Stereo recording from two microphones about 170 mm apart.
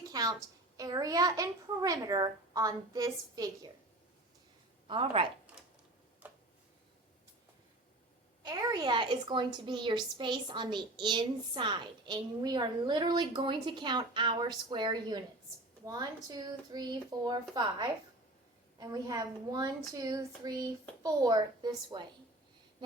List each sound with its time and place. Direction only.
0.1 s a sound: 25° right (ahead or behind)
0.8 s a woman's voice: 20° right (ahead or behind)
4.9 s a woman's voice: 30° right (ahead or behind)
8.4 s a woman's voice: 25° right (ahead or behind)